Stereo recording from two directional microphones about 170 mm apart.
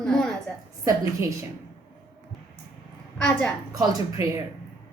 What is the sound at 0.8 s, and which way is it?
Speech, 20° right (ahead or behind).